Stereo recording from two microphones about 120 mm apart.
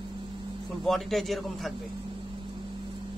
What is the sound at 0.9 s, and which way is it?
Speech, centre (ahead or behind).